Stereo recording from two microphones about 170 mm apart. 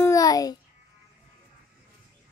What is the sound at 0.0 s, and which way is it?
Babbling, 20° left (ahead or behind).